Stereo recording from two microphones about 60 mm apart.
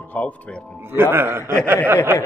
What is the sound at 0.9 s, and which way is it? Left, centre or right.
Speech, right.